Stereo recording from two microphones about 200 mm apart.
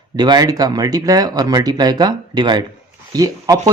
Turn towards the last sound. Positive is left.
turn(degrees=-15)  # may be behind; listen again after turning